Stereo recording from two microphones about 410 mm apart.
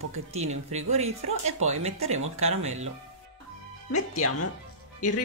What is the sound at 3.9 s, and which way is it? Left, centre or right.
Speech, left.